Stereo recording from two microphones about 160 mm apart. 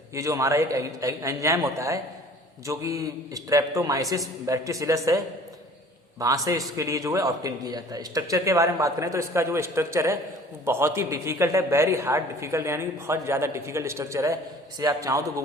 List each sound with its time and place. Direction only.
0.1 s a man's voice: 20° right (ahead or behind)